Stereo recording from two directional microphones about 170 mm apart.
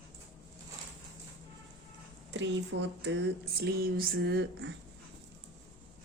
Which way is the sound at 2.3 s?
90° right.